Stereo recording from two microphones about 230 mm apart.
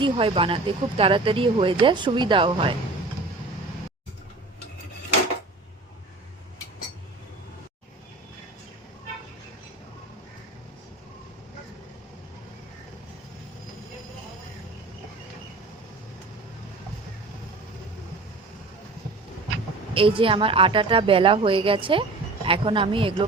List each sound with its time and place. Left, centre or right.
0.0 s speech: right
19.9 s speech: right